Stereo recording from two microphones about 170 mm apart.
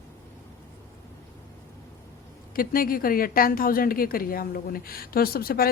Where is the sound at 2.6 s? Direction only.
60° left (ahead or behind).